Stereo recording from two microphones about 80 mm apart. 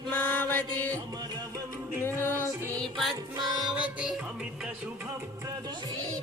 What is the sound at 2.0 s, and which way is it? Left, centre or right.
Music, left.